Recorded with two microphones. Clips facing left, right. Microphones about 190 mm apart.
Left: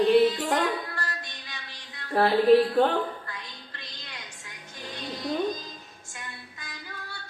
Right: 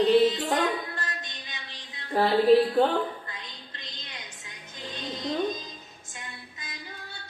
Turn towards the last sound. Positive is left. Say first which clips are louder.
# left 1 dB
turn(degrees=-20)  # may be behind; listen again after turning